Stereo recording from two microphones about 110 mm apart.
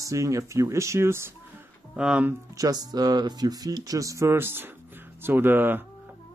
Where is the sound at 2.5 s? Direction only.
35° right (ahead or behind); by 5.8 s 20° right (ahead or behind).